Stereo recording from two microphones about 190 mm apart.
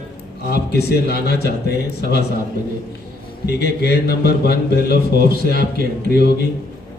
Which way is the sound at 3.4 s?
55° left (ahead or behind).